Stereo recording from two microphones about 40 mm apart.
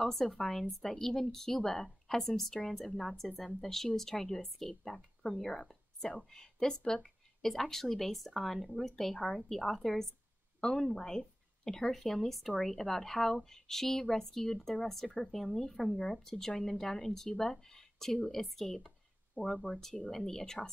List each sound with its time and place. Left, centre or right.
0.4 s speech: centre
7.4 s speech: centre
9.1 s speech: left
9.5 s a woman's voice: centre
19.4 s speech: right
19.7 s speech: centre